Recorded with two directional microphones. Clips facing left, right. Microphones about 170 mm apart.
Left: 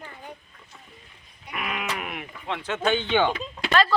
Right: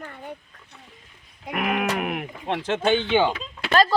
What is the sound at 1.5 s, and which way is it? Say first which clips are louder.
Speech: right 7 dB; 55° right (ahead or behind).